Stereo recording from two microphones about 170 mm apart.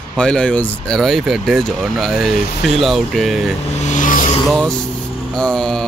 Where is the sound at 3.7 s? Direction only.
45° left (ahead or behind).